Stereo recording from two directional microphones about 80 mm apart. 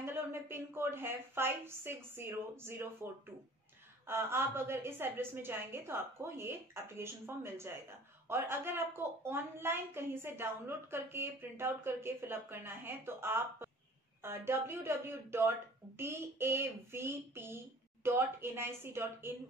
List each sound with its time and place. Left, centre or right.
0.0 s a woman's voice: right
4.1 s a woman's voice: right